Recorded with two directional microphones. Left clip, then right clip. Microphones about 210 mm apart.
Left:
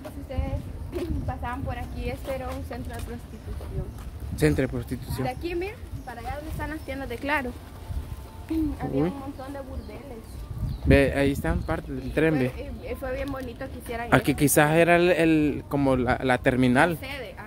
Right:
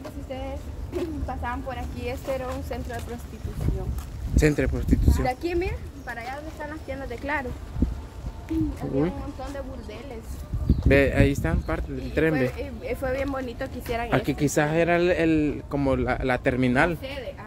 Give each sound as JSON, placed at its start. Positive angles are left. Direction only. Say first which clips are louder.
{"t": 0.9, "sound": "speech", "louder": "right 2 dB", "side_deg": -15}
{"t": 4.4, "sound": "speech", "louder": "right 1 dB", "side_deg": 10}
{"t": 5.2, "sound": "a woman's voice", "louder": "even", "side_deg": -25}
{"t": 6.9, "sound": "speech", "louder": "left 2 dB", "side_deg": 50}
{"t": 8.5, "sound": "speech", "louder": "even", "side_deg": 40}
{"t": 10.9, "sound": "speech", "louder": "even", "side_deg": 10}
{"t": 12.4, "sound": "speech", "louder": "right 2 dB", "side_deg": -15}
{"t": 14.1, "sound": "speech", "louder": "left 4 dB", "side_deg": 30}